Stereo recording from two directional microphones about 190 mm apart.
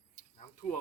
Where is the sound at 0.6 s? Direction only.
Centre (ahead or behind).